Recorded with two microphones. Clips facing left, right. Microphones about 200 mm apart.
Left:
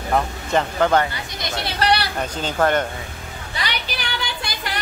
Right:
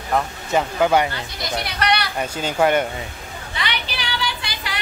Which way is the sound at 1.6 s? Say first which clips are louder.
Left 2 dB; 30° left (ahead or behind).